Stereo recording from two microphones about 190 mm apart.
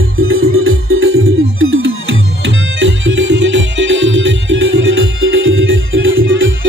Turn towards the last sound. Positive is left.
turn(degrees=-85)